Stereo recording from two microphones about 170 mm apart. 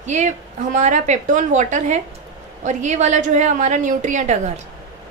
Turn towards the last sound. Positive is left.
turn(degrees=-45)  # may be behind; listen again after turning